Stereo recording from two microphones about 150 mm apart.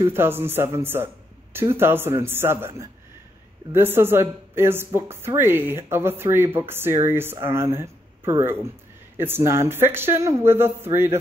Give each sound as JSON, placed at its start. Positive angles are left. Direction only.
{"t": 0.0, "sound": "speech", "side_deg": -15}